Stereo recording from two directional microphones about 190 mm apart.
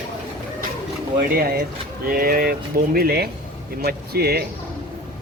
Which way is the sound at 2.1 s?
50° right (ahead or behind).